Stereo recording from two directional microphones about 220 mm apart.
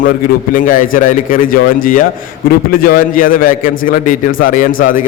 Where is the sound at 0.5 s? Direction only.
40° left (ahead or behind).